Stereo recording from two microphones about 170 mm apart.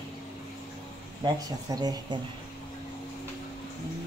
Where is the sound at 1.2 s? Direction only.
20° right (ahead or behind).